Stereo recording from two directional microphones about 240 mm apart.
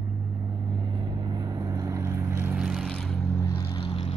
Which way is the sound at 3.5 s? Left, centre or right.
Left.